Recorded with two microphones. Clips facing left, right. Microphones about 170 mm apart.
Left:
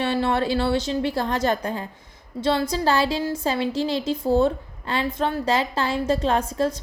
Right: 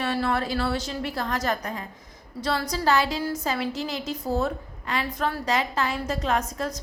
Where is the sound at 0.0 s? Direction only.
25° left (ahead or behind).